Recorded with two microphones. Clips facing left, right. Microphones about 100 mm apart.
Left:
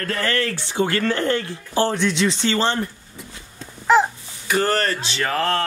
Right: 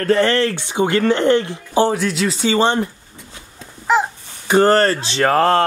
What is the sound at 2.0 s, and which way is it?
Speech, 5° right (ahead or behind).